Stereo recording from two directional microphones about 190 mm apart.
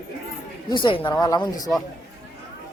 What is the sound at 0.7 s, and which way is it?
Speech, 25° left (ahead or behind).